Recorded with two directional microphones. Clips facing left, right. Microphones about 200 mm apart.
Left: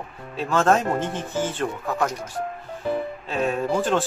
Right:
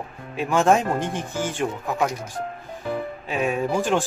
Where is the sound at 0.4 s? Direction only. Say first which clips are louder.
Right 1 dB; 15° right (ahead or behind).